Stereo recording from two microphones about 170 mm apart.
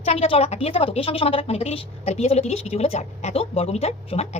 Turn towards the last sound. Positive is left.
turn(degrees=40)  # may be behind; listen again after turning